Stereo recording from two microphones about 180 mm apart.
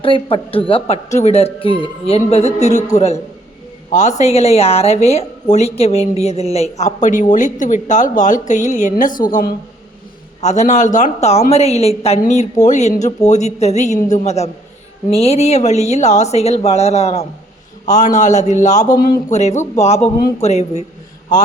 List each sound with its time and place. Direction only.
0.0 s a woman's voice: 30° left (ahead or behind); by 19.1 s 50° left (ahead or behind)
19.3 s a woman's voice: 40° left (ahead or behind)